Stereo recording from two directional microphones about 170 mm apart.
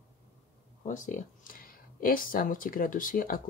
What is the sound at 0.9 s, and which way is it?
Speech, 50° left (ahead or behind).